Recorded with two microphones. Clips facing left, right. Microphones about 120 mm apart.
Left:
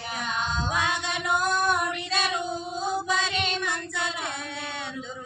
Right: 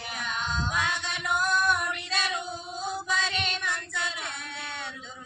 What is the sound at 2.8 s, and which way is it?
Music, 40° left (ahead or behind).